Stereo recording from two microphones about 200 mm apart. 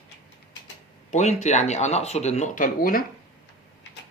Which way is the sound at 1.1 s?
35° left (ahead or behind).